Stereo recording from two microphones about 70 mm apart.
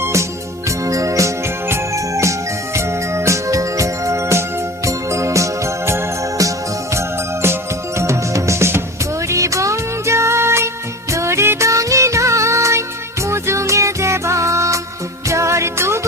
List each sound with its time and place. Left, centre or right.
0.0 s music: right
7.9 s music: right